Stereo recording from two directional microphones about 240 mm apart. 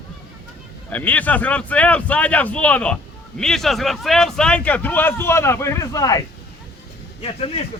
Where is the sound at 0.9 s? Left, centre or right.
Centre.